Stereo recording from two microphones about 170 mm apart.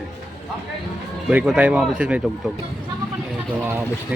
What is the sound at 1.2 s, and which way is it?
Speech, 5° right (ahead or behind).